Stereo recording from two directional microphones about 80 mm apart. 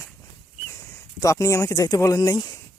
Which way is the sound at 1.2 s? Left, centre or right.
Left.